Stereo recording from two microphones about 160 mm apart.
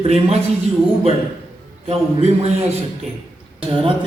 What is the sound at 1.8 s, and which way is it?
Speech, 40° right (ahead or behind).